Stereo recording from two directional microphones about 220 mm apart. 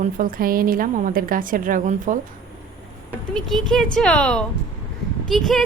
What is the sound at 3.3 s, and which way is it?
Speech, centre (ahead or behind).